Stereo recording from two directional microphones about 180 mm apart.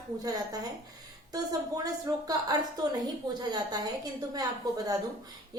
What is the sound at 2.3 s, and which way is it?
A woman's voice, 20° right (ahead or behind).